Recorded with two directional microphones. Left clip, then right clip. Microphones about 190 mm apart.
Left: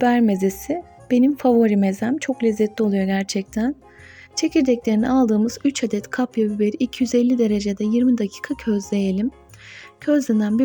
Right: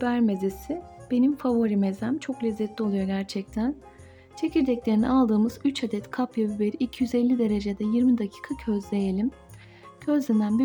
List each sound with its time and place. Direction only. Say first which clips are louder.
0.0 s speech: left 8 dB; 25° left (ahead or behind)